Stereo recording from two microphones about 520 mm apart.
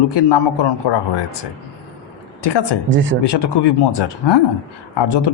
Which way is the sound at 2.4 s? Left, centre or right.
Left.